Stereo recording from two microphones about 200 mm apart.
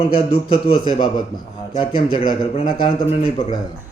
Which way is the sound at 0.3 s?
25° left (ahead or behind).